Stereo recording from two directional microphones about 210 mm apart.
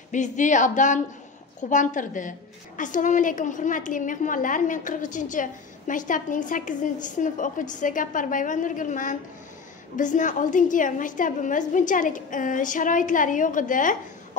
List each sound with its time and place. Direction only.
0.1 s a woman's voice: 35° left (ahead or behind)